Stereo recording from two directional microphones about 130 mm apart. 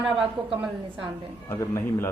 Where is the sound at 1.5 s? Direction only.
20° left (ahead or behind).